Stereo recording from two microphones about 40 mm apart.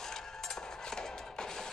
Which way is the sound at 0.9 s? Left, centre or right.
Centre.